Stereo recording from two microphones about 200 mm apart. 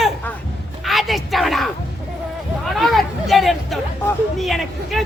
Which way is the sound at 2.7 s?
Centre (ahead or behind).